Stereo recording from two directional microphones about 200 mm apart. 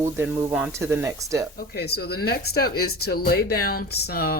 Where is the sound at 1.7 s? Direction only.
55° left (ahead or behind).